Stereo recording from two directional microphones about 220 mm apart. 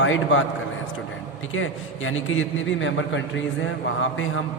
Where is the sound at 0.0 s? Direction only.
60° left (ahead or behind).